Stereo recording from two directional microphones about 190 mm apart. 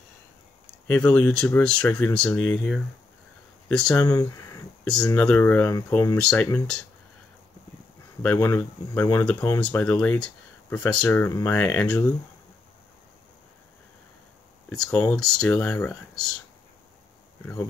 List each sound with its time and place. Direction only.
0.8 s speech: 10° left (ahead or behind)
4.0 s speech: 15° left (ahead or behind)
4.8 s speech: 5° left (ahead or behind)
8.2 s speech: 10° left (ahead or behind)
14.7 s speech: 5° left (ahead or behind)